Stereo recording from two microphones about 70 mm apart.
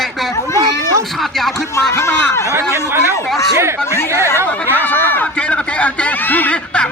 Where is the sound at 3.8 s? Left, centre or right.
Left.